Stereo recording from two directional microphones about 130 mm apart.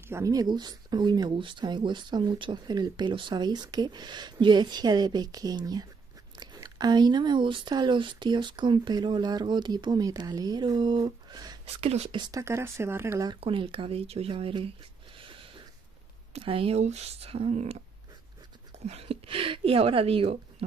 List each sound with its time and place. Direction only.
0.1 s speech: 25° right (ahead or behind)
11.6 s speech: 50° right (ahead or behind)
12.2 s speech: 25° right (ahead or behind)
13.4 s speech: 45° right (ahead or behind)
15.1 s a sound: 40° right (ahead or behind)
16.3 s speech: 45° right (ahead or behind)
18.9 s speech: 50° right (ahead or behind)